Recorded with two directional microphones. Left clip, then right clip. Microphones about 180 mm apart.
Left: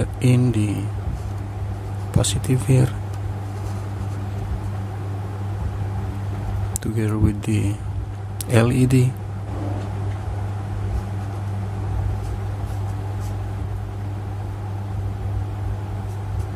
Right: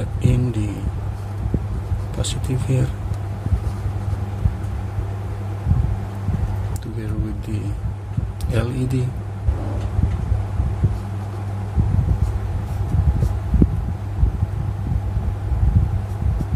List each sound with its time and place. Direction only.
0.0 s a sound: 15° left (ahead or behind)
2.1 s speech: 15° left (ahead or behind)
6.8 s speech: 30° left (ahead or behind)